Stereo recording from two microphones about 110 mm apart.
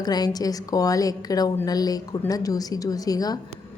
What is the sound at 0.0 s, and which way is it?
A woman's voice, 40° left (ahead or behind).